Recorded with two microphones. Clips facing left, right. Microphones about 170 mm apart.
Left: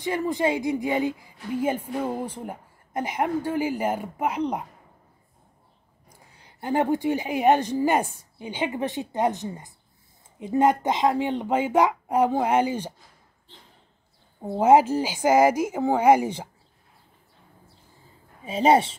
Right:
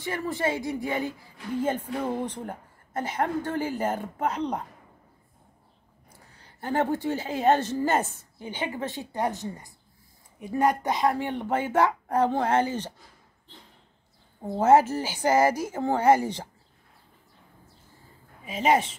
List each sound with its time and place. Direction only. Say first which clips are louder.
0.0 s a woman's voice: left 4 dB; 15° left (ahead or behind)
6.3 s a woman's voice: left 2 dB; 15° left (ahead or behind)
14.4 s a woman's voice: left 2 dB; 10° left (ahead or behind)
18.4 s a woman's voice: left 4 dB; 30° left (ahead or behind)